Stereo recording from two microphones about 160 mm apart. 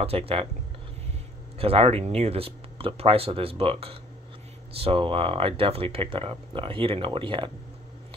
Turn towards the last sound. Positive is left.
turn(degrees=-30)  # may be behind; listen again after turning